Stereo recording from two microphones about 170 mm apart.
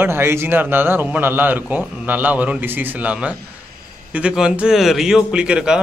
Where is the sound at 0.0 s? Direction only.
15° right (ahead or behind).